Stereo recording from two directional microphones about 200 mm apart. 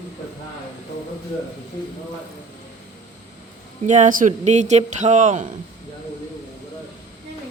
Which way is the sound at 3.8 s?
40° right (ahead or behind).